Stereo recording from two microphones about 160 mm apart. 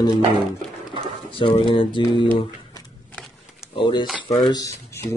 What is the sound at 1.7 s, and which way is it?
Speech, 30° left (ahead or behind).